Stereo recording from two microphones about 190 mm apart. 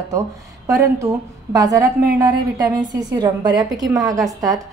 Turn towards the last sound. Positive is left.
turn(degrees=-20)  # may be behind; listen again after turning